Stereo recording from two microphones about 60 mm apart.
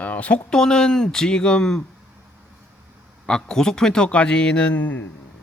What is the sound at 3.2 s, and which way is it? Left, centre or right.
Speech, centre.